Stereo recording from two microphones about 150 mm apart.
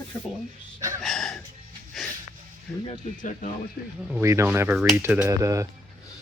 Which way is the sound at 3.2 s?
60° left (ahead or behind).